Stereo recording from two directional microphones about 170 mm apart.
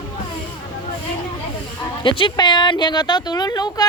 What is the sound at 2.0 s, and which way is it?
Speech, 30° left (ahead or behind).